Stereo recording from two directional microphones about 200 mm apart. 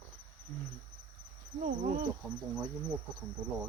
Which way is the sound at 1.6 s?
40° right (ahead or behind).